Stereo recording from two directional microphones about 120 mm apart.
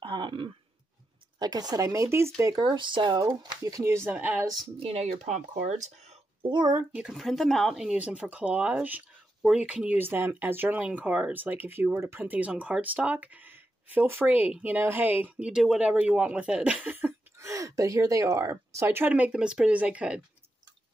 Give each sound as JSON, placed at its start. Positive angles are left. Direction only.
{"t": 0.0, "sound": "throat clearing", "side_deg": -45}
{"t": 1.4, "sound": "speech", "side_deg": -35}
{"t": 2.6, "sound": "speech", "side_deg": -40}
{"t": 4.7, "sound": "speech", "side_deg": -50}
{"t": 5.0, "sound": "speech", "side_deg": -85}
{"t": 6.5, "sound": "speech", "side_deg": -35}
{"t": 6.8, "sound": "speech", "side_deg": -10}